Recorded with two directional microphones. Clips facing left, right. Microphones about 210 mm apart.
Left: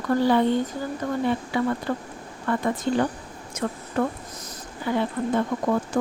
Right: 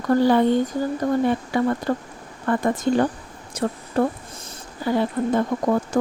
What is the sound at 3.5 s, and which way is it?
Speech, 35° right (ahead or behind).